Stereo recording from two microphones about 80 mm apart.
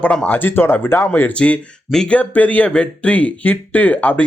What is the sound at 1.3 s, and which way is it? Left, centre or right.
Speech, centre.